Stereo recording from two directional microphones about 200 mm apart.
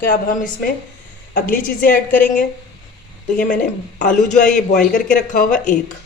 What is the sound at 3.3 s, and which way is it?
A man's voice, 40° left (ahead or behind).